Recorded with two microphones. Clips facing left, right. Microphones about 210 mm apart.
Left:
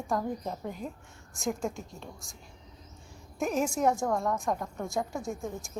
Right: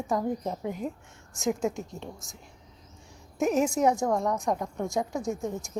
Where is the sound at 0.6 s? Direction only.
20° right (ahead or behind).